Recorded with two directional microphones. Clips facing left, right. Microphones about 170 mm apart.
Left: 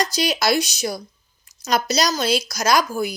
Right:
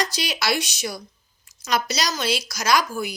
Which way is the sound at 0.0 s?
40° left (ahead or behind).